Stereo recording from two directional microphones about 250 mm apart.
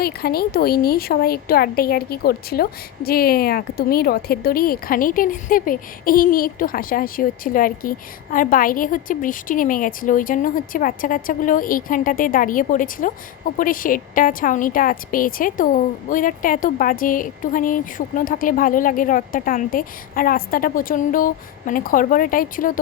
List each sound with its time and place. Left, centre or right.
0.0 s speech: left